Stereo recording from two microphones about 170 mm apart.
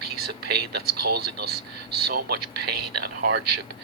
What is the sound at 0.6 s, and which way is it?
Speech, 65° right (ahead or behind).